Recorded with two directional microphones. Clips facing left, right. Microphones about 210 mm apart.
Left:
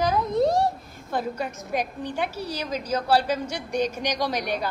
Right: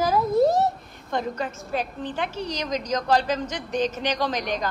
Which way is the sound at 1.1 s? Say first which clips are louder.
Right 1 dB; 10° left (ahead or behind).